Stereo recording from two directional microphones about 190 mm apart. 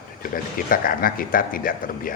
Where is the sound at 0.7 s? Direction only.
50° left (ahead or behind).